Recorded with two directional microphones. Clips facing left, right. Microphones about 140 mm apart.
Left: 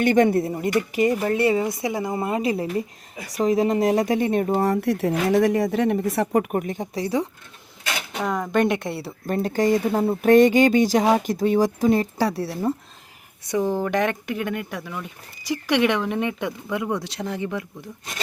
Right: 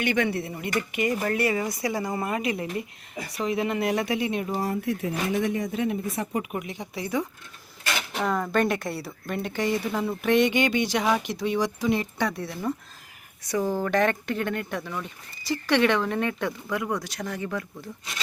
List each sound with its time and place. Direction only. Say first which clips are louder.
0.0 s a woman's voice: left 8 dB; 45° left (ahead or behind)
1.2 s speech: left 5 dB; 25° left (ahead or behind); by 4.6 s 45° left (ahead or behind)
4.6 s speech: left 6 dB; 75° left (ahead or behind)
6.3 s speech: left 8 dB; 50° left (ahead or behind)
8.2 s speech: left 3 dB; 15° left (ahead or behind)
9.2 s speech: left 7 dB; 40° left (ahead or behind)
13.4 s speech: left 3 dB; 20° left (ahead or behind)